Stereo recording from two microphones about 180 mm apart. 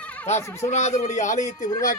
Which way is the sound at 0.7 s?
40° left (ahead or behind).